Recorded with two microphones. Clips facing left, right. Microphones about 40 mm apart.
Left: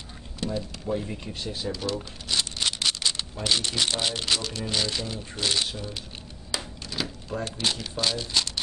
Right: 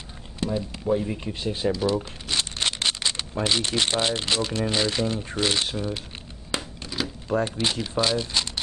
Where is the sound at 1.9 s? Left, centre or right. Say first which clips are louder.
Right 5 dB; right.